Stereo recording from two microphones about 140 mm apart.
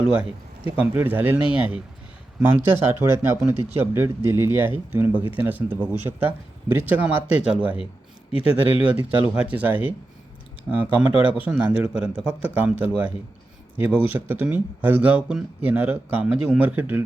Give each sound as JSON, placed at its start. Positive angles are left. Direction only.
{"t": 0.8, "sound": "speech", "side_deg": -15}
{"t": 8.6, "sound": "speech", "side_deg": 45}
{"t": 9.3, "sound": "speech", "side_deg": -10}